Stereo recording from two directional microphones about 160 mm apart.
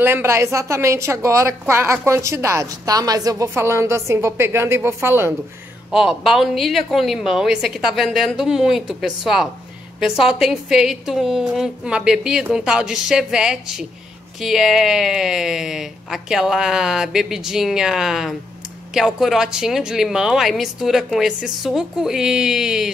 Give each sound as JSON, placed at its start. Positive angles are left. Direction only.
{"t": 0.0, "sound": "speech", "side_deg": -15}
{"t": 5.9, "sound": "a woman's voice", "side_deg": -5}